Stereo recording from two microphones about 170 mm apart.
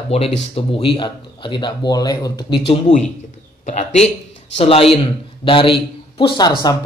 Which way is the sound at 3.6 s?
45° left (ahead or behind).